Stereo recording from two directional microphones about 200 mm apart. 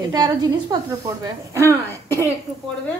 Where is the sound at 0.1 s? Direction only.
20° right (ahead or behind).